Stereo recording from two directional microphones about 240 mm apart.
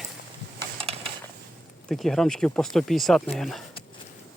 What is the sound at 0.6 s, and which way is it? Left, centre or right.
Mechanisms, right.